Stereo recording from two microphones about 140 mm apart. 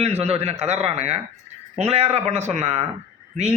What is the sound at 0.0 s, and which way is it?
A man's voice, 50° right (ahead or behind).